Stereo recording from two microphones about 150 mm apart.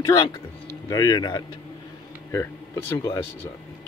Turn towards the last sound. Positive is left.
turn(degrees=20)  # may be behind; listen again after turning